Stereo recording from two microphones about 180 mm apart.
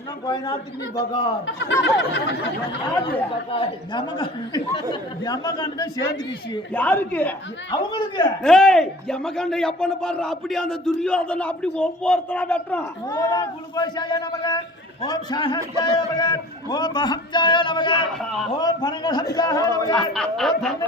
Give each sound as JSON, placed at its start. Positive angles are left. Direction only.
{"t": 0.9, "sound": "a man's voice", "side_deg": 25}
{"t": 1.5, "sound": "a sound", "side_deg": 80}
{"t": 2.9, "sound": "a woman's voice", "side_deg": 10}
{"t": 3.5, "sound": "a man's voice", "side_deg": 30}
{"t": 6.7, "sound": "a woman's voice", "side_deg": 10}
{"t": 7.7, "sound": "a man's voice", "side_deg": 25}
{"t": 8.4, "sound": "a man's voice", "side_deg": 5}
{"t": 13.1, "sound": "a man's voice", "side_deg": 20}
{"t": 18.2, "sound": "a man's voice", "side_deg": 0}
{"t": 18.5, "sound": "a man's voice", "side_deg": 25}
{"t": 20.0, "sound": "a man's voice", "side_deg": 5}